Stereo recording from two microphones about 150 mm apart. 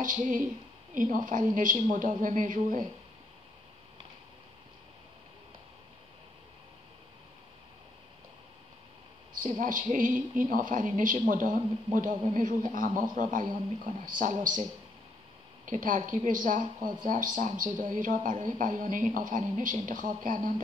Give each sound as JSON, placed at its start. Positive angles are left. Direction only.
{"t": 0.0, "sound": "a man's voice", "side_deg": -60}
{"t": 9.6, "sound": "a man's voice", "side_deg": -60}
{"t": 15.6, "sound": "a man's voice", "side_deg": -60}